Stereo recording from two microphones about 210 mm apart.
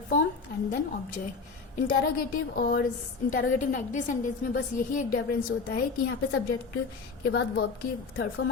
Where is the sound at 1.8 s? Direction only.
45° left (ahead or behind).